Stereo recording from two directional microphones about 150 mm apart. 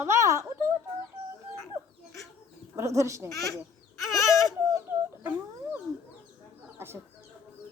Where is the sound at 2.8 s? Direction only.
20° right (ahead or behind).